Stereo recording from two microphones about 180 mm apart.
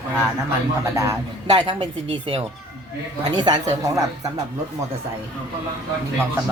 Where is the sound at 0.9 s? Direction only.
20° right (ahead or behind).